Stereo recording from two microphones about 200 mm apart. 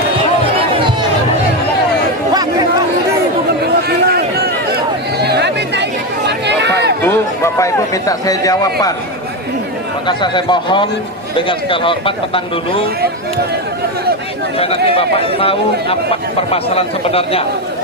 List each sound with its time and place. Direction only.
3.8 s a sound: 50° right (ahead or behind)
5.2 s chatter: 55° right (ahead or behind)
6.5 s run: 60° right (ahead or behind)
7.0 s a sound: 15° left (ahead or behind)
10.1 s a man's voice: 25° left (ahead or behind)
14.6 s a man's voice: 30° left (ahead or behind)